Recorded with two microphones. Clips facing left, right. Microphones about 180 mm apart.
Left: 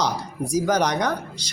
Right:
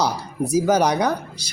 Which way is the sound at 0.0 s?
5° right (ahead or behind).